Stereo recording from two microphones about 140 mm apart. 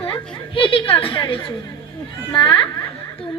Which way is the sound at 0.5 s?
40° left (ahead or behind).